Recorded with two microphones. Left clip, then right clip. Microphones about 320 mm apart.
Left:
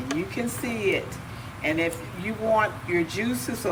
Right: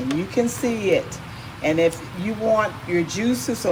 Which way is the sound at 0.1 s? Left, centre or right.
Centre.